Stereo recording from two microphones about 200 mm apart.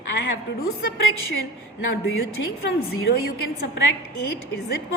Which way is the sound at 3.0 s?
50° left (ahead or behind).